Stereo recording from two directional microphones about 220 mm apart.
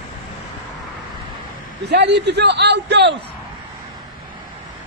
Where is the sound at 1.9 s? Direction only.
50° right (ahead or behind).